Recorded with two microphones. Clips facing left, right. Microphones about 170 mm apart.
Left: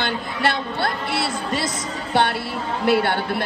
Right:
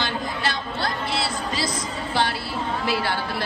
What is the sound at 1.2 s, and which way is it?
Speech, centre (ahead or behind).